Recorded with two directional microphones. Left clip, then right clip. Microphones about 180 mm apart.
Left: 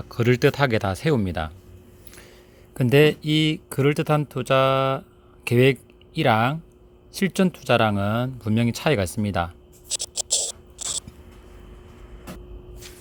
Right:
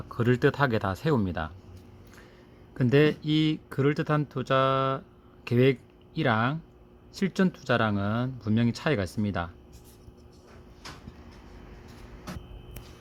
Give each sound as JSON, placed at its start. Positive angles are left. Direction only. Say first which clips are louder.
{"t": 0.1, "sound": "speech", "louder": "left 5 dB", "side_deg": 30}
{"t": 2.7, "sound": "speech", "louder": "left 6 dB", "side_deg": 25}